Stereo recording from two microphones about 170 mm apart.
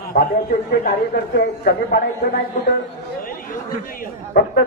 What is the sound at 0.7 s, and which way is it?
A woman's voice, 65° left (ahead or behind).